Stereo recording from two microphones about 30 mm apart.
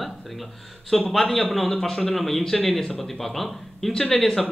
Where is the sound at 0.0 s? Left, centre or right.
Centre.